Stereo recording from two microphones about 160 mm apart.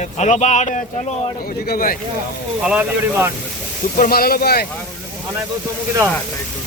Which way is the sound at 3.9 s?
65° left (ahead or behind).